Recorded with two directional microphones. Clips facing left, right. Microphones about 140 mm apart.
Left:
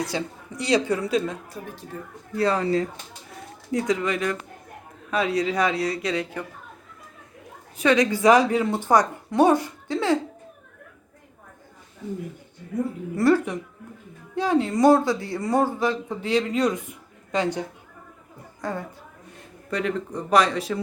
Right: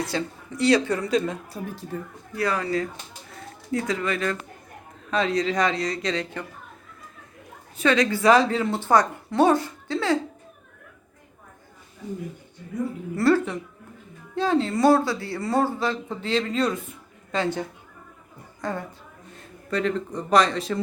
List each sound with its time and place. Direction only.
0.0 s speech: 15° left (ahead or behind)
2.3 s speech: 25° left (ahead or behind); by 6.4 s 10° left (ahead or behind)
7.8 s speech: 15° left (ahead or behind)
13.1 s speech: 15° left (ahead or behind)